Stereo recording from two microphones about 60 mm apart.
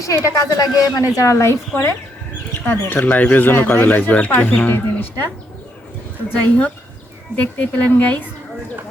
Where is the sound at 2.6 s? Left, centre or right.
Left.